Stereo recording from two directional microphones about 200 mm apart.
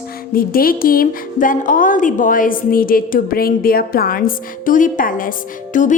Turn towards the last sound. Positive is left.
turn(degrees=40)  # may be behind; listen again after turning